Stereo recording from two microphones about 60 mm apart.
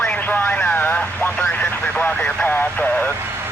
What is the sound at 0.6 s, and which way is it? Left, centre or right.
Vehicle, left.